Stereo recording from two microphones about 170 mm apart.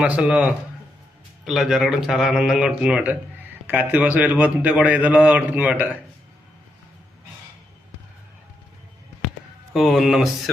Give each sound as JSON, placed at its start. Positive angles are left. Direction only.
{"t": 0.0, "sound": "a man's voice", "side_deg": -5}
{"t": 9.7, "sound": "a man's voice", "side_deg": 0}